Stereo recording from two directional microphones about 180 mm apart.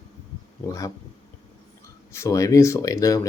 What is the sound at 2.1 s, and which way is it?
Speech, 15° left (ahead or behind).